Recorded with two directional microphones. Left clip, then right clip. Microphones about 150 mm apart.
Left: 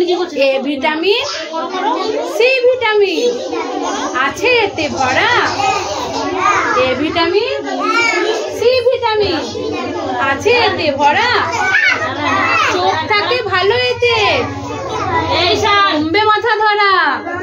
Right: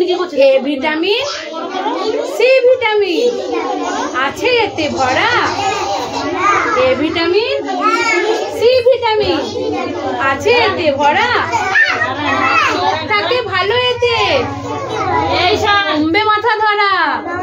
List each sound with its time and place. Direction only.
0.4 s a child's voice: 10° left (ahead or behind)
2.3 s a child's voice: 10° left (ahead or behind)
4.2 s a child's voice: 15° left (ahead or behind)
6.8 s a child's voice: 10° left (ahead or behind)
8.6 s a child's voice: 10° left (ahead or behind)
13.1 s a child's voice: 25° left (ahead or behind)
16.1 s a child's voice: 20° left (ahead or behind)